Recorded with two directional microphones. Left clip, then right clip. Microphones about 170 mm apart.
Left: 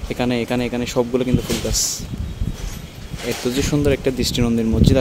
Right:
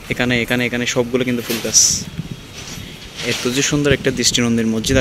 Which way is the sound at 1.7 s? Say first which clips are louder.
Right 8 dB; 25° left (ahead or behind).